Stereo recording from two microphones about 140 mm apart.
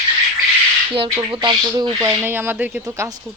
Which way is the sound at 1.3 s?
35° right (ahead or behind).